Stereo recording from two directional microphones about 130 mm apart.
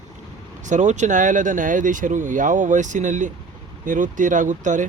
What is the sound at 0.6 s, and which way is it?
Speech, 65° right (ahead or behind).